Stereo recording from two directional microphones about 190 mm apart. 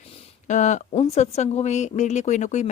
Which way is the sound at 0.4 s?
40° left (ahead or behind).